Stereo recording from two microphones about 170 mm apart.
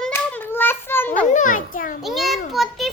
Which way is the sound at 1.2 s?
50° left (ahead or behind).